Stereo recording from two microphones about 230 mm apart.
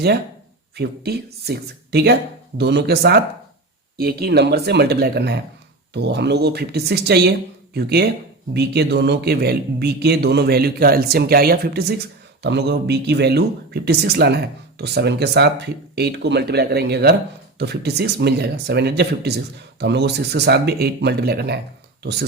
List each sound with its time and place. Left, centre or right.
0.8 s speech: right